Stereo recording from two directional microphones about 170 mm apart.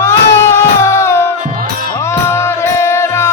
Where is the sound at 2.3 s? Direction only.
15° left (ahead or behind).